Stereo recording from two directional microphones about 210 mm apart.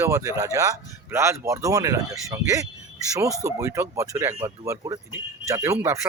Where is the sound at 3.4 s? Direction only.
15° right (ahead or behind).